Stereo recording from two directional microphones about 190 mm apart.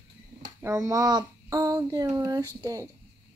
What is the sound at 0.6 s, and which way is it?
Speech, 15° right (ahead or behind).